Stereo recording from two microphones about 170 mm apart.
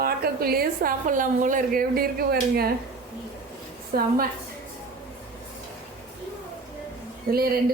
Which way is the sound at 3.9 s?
60° right (ahead or behind).